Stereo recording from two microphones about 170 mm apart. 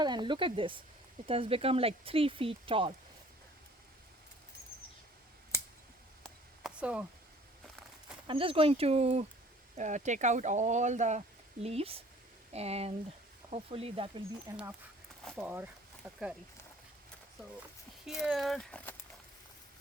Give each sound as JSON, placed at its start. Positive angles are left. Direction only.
{"t": 0.0, "sound": "speech", "side_deg": -25}
{"t": 5.5, "sound": "a sound", "side_deg": 15}
{"t": 6.2, "sound": "a sound", "side_deg": 0}
{"t": 8.3, "sound": "speech", "side_deg": -30}
{"t": 15.4, "sound": "speech", "side_deg": -10}
{"t": 18.0, "sound": "speech", "side_deg": 0}